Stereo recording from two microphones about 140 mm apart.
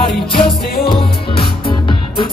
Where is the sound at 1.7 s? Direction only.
35° left (ahead or behind).